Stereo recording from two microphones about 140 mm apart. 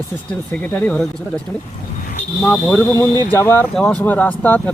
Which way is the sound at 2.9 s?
25° left (ahead or behind).